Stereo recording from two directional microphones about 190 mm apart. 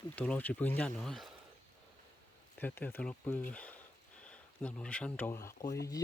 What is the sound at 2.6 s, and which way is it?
Speech, 10° left (ahead or behind).